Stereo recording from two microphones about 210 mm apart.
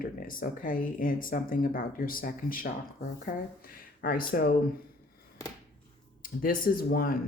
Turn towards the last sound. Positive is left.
turn(degrees=45)  # may be behind; listen again after turning